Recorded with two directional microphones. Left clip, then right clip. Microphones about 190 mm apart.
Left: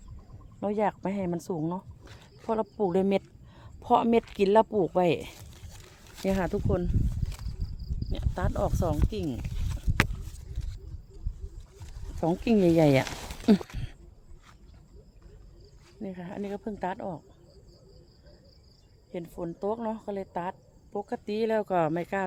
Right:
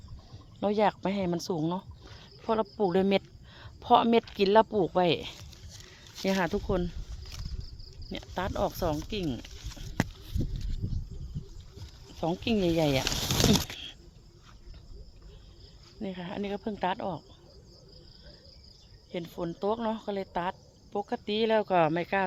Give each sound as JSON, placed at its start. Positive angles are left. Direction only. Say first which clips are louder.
{"t": 0.6, "sound": "speech", "louder": "right 2 dB", "side_deg": 5}
{"t": 8.1, "sound": "speech", "louder": "even", "side_deg": 0}
{"t": 12.2, "sound": "speech", "louder": "left 4 dB", "side_deg": 35}
{"t": 16.0, "sound": "speech", "louder": "right 1 dB", "side_deg": -5}
{"t": 19.1, "sound": "speech", "louder": "right 1 dB", "side_deg": -5}